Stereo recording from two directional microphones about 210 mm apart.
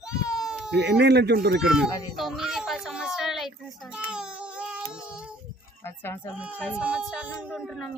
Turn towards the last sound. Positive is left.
turn(degrees=0)  # may be behind; listen again after turning